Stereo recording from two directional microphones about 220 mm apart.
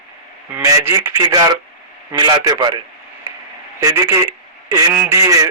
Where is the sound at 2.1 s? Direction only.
20° right (ahead or behind).